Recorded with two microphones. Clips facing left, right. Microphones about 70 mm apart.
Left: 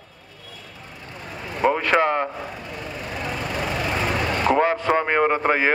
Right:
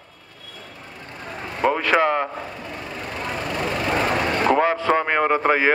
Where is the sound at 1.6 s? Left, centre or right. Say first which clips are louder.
Even; centre.